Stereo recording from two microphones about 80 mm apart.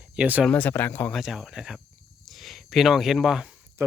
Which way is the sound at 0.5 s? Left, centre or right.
Left.